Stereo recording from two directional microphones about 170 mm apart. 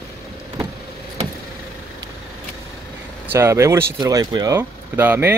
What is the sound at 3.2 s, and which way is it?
Speech, 15° right (ahead or behind).